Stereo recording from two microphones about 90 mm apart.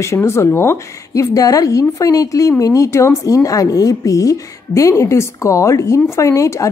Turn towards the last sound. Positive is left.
turn(degrees=35)  # may be behind; listen again after turning